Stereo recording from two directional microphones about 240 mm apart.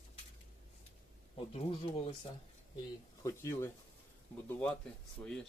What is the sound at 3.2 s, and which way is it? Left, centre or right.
Speech, centre.